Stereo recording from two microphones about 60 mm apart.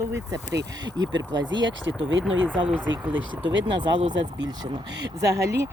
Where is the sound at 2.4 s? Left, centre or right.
Right.